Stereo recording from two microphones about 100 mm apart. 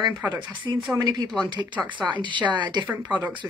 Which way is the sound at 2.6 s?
50° right (ahead or behind).